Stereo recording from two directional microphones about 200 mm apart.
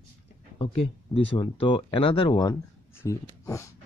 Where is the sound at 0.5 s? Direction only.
25° left (ahead or behind).